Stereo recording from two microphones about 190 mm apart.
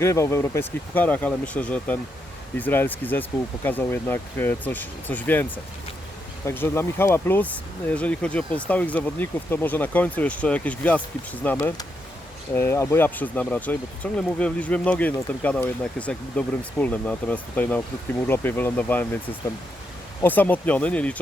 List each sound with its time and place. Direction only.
0.0 s speech: 15° left (ahead or behind)
11.5 s speech: 20° left (ahead or behind)